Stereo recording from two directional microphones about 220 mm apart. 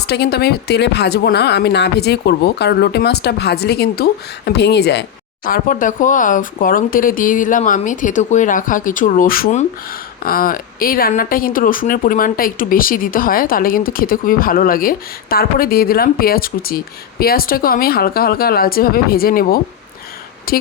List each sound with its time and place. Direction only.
0.1 s speech: 45° left (ahead or behind)
5.5 s speech: 40° left (ahead or behind)